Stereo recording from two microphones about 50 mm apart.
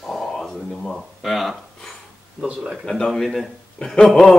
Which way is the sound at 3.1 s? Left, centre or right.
Centre.